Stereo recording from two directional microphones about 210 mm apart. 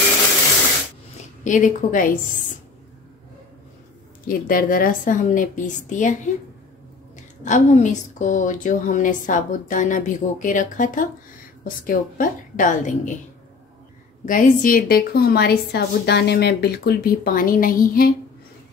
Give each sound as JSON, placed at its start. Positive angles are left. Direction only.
{"t": 1.4, "sound": "a woman's voice", "side_deg": 35}
{"t": 4.3, "sound": "a woman's voice", "side_deg": 40}
{"t": 7.4, "sound": "a woman's voice", "side_deg": 35}
{"t": 14.2, "sound": "a woman's voice", "side_deg": 40}